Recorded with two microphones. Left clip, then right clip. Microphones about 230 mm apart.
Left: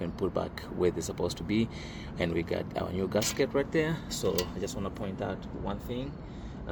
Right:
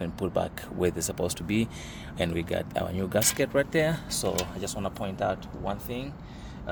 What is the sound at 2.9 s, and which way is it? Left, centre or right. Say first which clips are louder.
Speech: right 1 dB; right.